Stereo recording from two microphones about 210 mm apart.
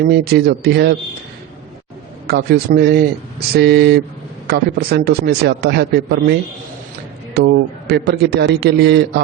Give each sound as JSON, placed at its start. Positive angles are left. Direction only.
{"t": 0.0, "sound": "a man's voice", "side_deg": -50}
{"t": 2.2, "sound": "a man's voice", "side_deg": -50}
{"t": 7.3, "sound": "a man's voice", "side_deg": -50}